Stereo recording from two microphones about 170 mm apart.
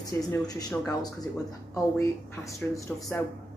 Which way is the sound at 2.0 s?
20° left (ahead or behind).